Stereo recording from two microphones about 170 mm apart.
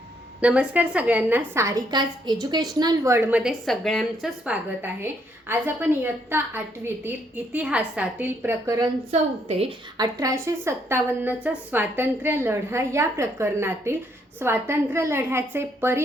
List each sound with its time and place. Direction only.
0.4 s a woman's voice: 5° right (ahead or behind)
5.5 s a woman's voice: 10° right (ahead or behind)
9.1 s a woman's voice: 40° right (ahead or behind)
10.0 s a woman's voice: 20° right (ahead or behind)